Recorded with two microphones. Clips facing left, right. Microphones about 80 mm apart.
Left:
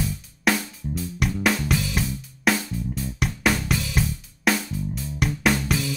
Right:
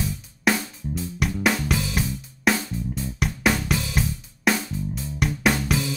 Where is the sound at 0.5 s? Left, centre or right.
Centre.